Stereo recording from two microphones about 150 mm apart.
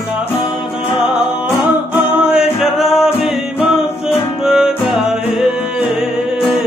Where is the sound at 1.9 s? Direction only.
10° right (ahead or behind).